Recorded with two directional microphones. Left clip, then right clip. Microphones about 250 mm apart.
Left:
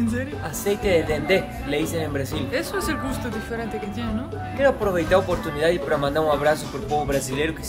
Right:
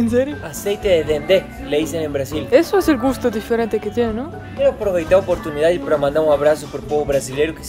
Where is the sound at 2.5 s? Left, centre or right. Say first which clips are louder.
Right 13 dB; centre.